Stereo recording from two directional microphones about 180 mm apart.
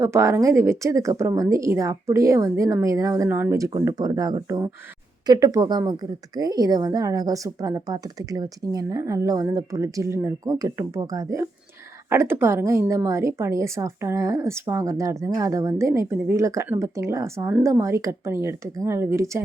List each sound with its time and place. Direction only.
0.0 s a woman's voice: 15° right (ahead or behind)